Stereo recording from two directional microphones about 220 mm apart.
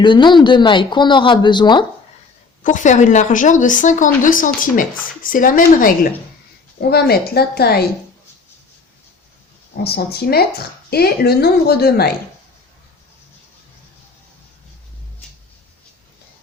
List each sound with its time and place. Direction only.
0.0 s speech: 20° left (ahead or behind)
2.6 s a woman's voice: 35° left (ahead or behind)
9.8 s a woman's voice: 45° left (ahead or behind)